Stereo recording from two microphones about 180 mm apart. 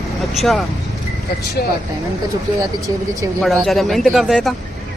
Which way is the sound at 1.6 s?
60° left (ahead or behind).